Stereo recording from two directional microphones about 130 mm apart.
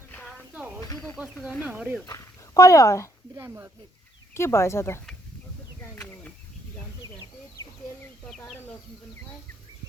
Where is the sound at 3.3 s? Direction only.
20° right (ahead or behind).